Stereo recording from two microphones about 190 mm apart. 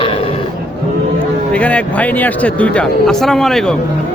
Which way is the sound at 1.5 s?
5° left (ahead or behind).